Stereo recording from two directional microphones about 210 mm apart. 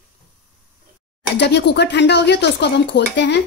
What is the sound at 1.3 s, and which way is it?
Speech, 55° left (ahead or behind).